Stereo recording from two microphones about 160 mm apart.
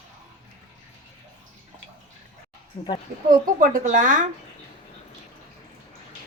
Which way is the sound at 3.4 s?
55° right (ahead or behind).